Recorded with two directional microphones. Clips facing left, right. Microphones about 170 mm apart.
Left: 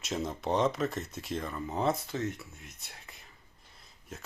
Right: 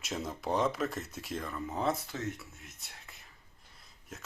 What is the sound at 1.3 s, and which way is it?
Speech, 25° left (ahead or behind).